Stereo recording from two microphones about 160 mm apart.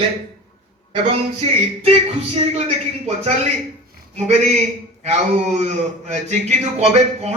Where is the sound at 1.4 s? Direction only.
40° right (ahead or behind).